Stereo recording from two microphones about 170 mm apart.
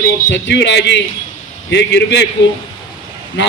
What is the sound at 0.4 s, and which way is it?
A man's voice, 90° left.